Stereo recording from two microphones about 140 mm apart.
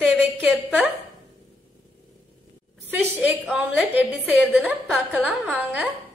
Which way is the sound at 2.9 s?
15° right (ahead or behind).